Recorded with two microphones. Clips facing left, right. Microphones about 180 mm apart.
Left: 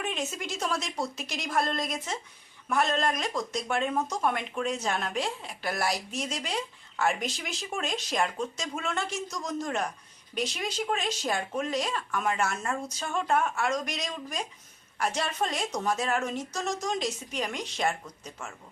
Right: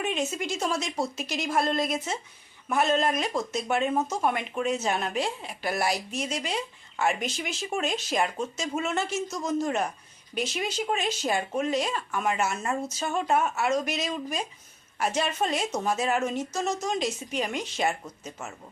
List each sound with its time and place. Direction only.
0.0 s a woman's voice: centre (ahead or behind)
18.0 s speech: 20° right (ahead or behind)